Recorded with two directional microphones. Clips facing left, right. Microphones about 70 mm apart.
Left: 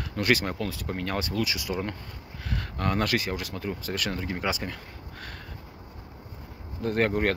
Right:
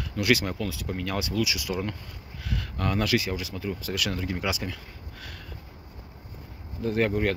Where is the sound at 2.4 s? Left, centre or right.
Left.